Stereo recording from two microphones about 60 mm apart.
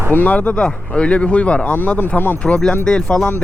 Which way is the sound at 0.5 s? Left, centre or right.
Centre.